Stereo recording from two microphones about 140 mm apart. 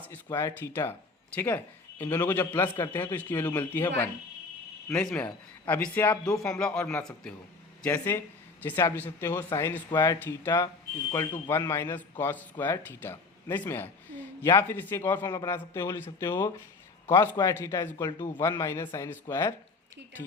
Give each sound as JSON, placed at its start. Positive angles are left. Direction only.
{"t": 0.3, "sound": "a man's voice", "side_deg": 20}